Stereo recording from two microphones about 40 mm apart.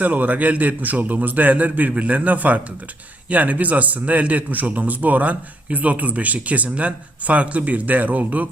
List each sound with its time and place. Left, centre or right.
0.0 s a man's voice: right